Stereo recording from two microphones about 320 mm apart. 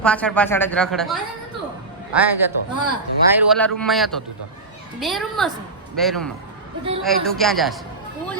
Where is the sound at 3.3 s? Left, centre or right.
Centre.